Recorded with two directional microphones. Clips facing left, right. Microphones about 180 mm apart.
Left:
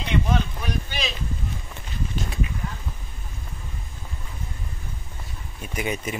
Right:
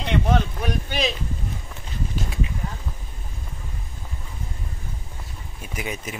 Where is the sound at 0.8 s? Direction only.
50° right (ahead or behind).